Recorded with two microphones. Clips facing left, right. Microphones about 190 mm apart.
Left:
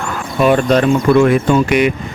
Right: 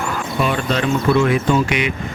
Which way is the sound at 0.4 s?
50° left (ahead or behind).